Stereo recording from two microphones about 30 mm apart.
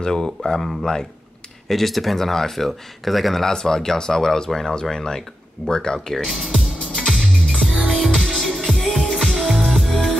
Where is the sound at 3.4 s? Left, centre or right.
Centre.